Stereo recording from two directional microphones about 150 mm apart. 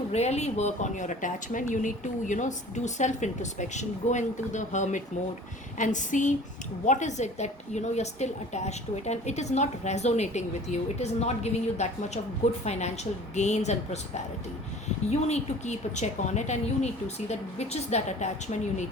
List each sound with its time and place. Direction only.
0.1 s a woman's voice: 45° left (ahead or behind)
5.7 s a sound: 55° left (ahead or behind)
6.8 s a woman's voice: 55° left (ahead or behind)
15.1 s a woman's voice: 50° left (ahead or behind)